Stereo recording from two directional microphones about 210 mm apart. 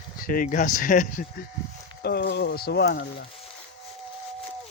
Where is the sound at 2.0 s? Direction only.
50° left (ahead or behind).